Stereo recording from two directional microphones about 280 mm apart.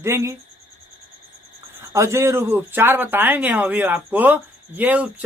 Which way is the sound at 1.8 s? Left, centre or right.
Centre.